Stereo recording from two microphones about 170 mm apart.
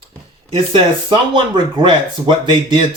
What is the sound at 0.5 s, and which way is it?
Speech, 30° right (ahead or behind).